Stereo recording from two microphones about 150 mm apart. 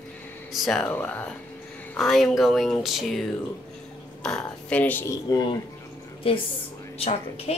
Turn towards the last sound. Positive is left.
turn(degrees=45)  # may be behind; listen again after turning